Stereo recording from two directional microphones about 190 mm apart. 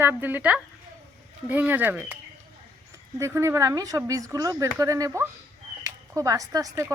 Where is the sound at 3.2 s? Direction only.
15° right (ahead or behind).